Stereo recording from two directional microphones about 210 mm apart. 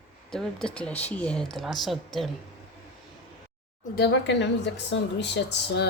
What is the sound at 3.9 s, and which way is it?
Speech, 55° left (ahead or behind).